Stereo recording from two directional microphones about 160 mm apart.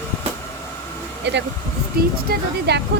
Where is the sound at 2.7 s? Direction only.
90° right.